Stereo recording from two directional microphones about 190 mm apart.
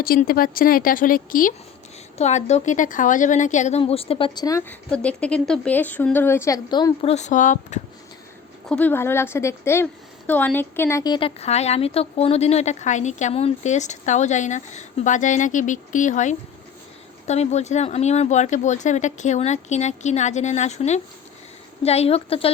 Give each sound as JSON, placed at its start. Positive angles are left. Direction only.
{"t": 0.0, "sound": "a woman's voice", "side_deg": 50}
{"t": 4.9, "sound": "speech", "side_deg": 5}
{"t": 7.1, "sound": "a woman's voice", "side_deg": 40}
{"t": 8.7, "sound": "a woman's voice", "side_deg": 10}